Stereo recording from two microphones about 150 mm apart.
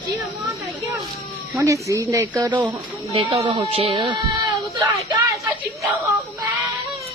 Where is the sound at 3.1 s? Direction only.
35° right (ahead or behind).